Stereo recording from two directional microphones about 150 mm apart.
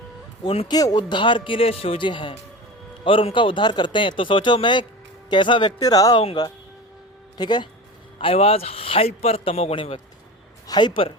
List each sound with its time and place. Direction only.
0.4 s speech: 40° left (ahead or behind)
0.7 s speech: 25° left (ahead or behind)
8.2 s speech: 40° left (ahead or behind)